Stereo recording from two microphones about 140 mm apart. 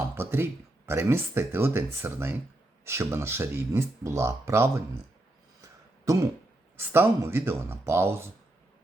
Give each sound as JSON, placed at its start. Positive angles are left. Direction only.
{"t": 0.1, "sound": "speech", "side_deg": -15}
{"t": 6.7, "sound": "speech", "side_deg": -15}